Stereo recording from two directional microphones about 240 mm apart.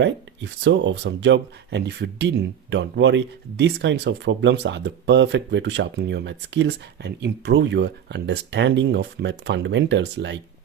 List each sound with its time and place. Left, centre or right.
0.0 s speech: right